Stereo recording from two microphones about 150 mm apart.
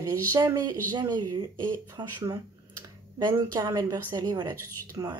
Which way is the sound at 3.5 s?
25° right (ahead or behind).